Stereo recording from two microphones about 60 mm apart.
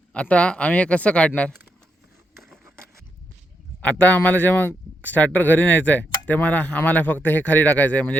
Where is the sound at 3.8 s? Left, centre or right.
Left.